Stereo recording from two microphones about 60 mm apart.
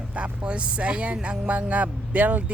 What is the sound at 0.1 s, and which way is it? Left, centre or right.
Speech, centre.